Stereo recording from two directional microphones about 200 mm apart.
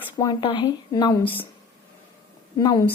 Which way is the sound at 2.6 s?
20° left (ahead or behind).